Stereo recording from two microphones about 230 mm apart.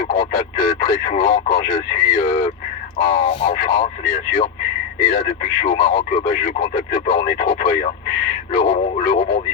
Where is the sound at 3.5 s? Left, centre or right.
Left.